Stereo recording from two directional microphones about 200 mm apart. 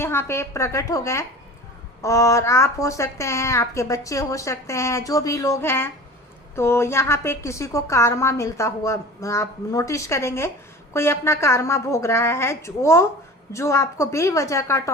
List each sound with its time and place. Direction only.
0.0 s a woman's voice: 10° left (ahead or behind)